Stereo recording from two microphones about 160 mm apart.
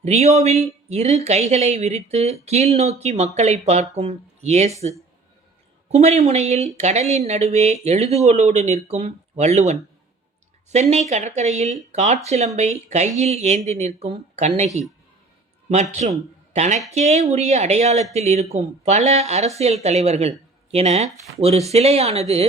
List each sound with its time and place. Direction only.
0.0 s speech: 40° right (ahead or behind)
5.9 s speech: 40° right (ahead or behind)
15.7 s speech: 45° right (ahead or behind)